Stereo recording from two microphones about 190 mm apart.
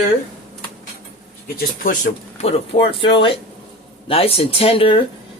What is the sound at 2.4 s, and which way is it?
Speech, 30° left (ahead or behind).